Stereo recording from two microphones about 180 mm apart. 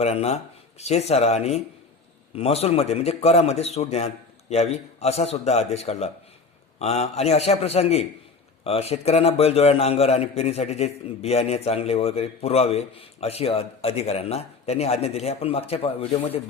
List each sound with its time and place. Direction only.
0.0 s a man's voice: 35° left (ahead or behind)